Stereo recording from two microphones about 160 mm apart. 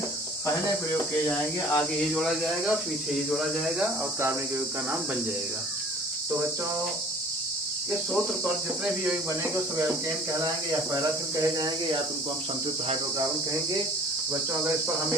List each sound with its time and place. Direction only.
1.3 s speech: 5° left (ahead or behind)
11.5 s speech: 25° right (ahead or behind)